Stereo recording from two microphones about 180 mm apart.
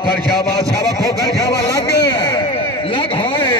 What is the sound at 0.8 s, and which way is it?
Speech, 20° right (ahead or behind).